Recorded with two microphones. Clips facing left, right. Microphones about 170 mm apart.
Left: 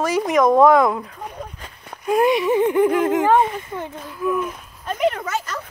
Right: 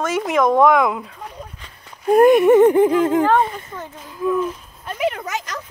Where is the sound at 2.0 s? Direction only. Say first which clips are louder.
Right 6 dB; 45° right (ahead or behind).